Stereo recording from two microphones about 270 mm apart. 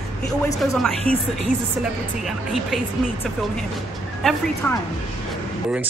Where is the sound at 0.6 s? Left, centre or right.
Centre.